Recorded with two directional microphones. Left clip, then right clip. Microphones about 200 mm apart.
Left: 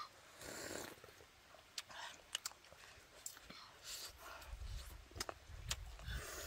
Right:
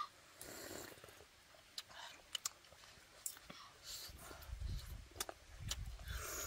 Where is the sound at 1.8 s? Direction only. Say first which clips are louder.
Left 2 dB; 10° left (ahead or behind).